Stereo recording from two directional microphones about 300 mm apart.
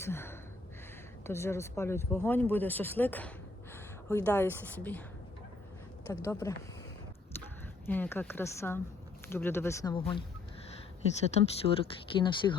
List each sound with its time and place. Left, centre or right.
0.0 s gasp: centre
1.3 s speech: centre
6.2 s speech: centre
7.9 s speech: centre
11.3 s speech: centre